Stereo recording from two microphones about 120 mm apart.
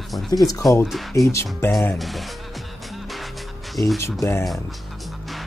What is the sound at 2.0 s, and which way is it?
Speech, centre (ahead or behind).